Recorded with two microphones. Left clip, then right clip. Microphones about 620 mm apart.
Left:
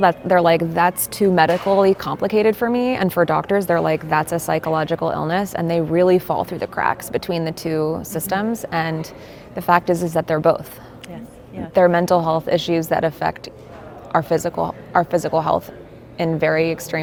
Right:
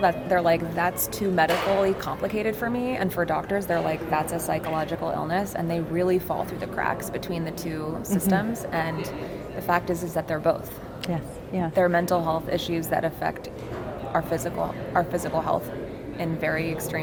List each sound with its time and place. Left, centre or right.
0.0 s a woman's voice: left
11.7 s a woman's voice: left